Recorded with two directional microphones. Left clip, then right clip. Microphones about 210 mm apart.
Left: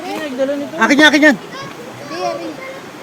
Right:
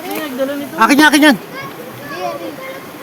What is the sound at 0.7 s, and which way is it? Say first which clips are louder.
Speech: right 1 dB; 55° right (ahead or behind).